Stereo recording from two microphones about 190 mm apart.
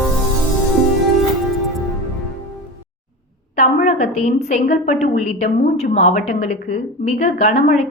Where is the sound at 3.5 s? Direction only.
40° left (ahead or behind).